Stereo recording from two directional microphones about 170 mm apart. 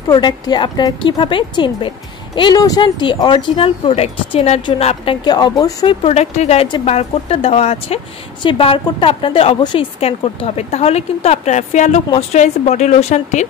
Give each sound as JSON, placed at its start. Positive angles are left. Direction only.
{"t": 0.1, "sound": "speech", "side_deg": 25}
{"t": 6.0, "sound": "speech", "side_deg": 40}